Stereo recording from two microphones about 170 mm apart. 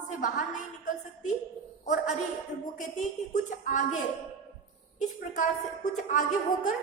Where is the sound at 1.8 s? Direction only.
45° left (ahead or behind).